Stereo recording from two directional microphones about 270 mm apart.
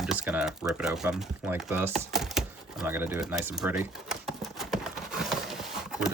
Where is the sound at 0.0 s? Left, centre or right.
Centre.